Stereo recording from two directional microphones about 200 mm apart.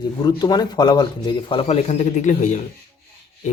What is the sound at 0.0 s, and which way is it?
Speech, 20° left (ahead or behind).